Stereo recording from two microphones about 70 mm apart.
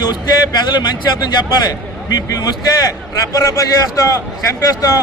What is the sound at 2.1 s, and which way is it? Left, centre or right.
A man's voice, left.